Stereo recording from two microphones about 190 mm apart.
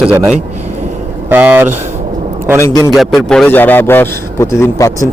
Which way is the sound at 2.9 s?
Centre (ahead or behind).